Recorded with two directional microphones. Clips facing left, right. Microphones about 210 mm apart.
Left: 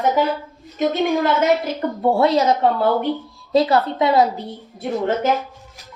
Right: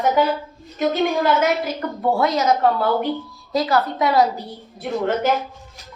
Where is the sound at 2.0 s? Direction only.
30° left (ahead or behind).